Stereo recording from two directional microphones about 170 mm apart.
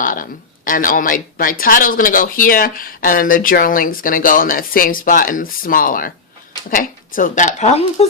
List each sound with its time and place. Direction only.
0.0 s a woman's voice: 55° left (ahead or behind)